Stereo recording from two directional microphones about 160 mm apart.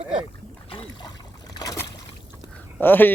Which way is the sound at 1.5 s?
20° left (ahead or behind).